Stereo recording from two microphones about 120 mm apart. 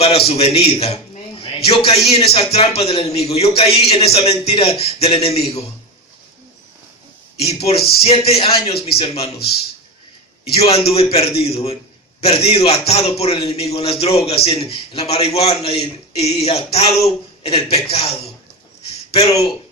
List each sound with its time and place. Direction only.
0.0 s a man's voice: 60° left (ahead or behind)
7.3 s a man's voice: 60° left (ahead or behind)
10.4 s a man's voice: 55° left (ahead or behind)